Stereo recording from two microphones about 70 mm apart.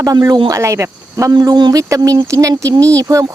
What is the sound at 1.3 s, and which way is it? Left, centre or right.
Speech, right.